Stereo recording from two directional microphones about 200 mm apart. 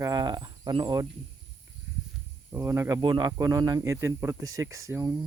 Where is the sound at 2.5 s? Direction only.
15° right (ahead or behind).